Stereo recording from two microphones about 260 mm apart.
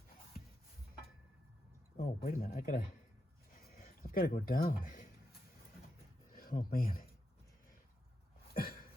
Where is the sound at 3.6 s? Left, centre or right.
Left.